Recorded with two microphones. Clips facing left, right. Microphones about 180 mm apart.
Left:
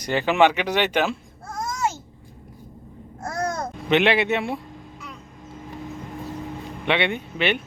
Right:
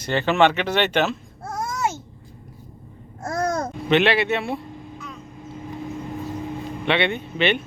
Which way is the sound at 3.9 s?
15° left (ahead or behind).